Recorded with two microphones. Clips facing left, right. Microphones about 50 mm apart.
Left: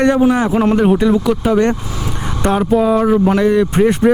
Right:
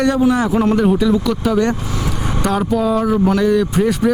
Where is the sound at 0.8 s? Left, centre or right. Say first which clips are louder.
Left 2 dB; left.